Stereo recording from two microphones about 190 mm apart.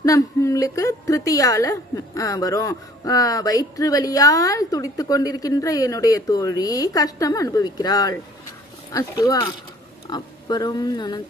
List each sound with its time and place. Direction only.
0.0 s a woman's voice: 15° left (ahead or behind)